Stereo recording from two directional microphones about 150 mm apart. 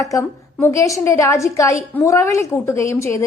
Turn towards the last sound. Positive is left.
turn(degrees=20)  # may be behind; listen again after turning